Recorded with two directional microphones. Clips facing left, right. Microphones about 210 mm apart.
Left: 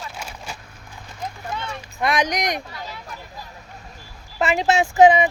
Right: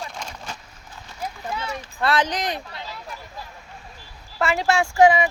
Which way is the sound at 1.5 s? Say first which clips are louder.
Right 2 dB; 5° right (ahead or behind).